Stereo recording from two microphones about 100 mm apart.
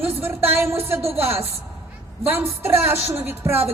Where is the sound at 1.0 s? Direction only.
80° right.